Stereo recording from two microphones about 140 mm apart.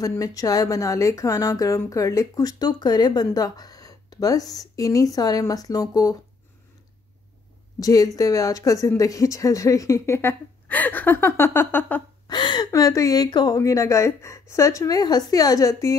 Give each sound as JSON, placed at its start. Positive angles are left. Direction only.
{"t": 0.0, "sound": "a woman's voice", "side_deg": 25}
{"t": 7.8, "sound": "a woman's voice", "side_deg": 25}
{"t": 12.3, "sound": "a woman's voice", "side_deg": 30}